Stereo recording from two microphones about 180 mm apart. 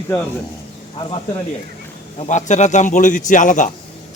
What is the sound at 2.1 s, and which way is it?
A man's voice, 40° left (ahead or behind).